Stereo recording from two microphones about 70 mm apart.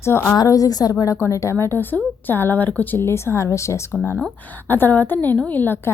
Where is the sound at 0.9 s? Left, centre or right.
Left.